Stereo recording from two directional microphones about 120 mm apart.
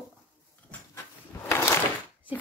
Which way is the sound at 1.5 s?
20° left (ahead or behind).